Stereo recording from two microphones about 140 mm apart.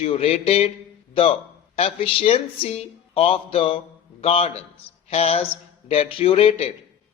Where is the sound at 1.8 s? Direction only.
45° left (ahead or behind).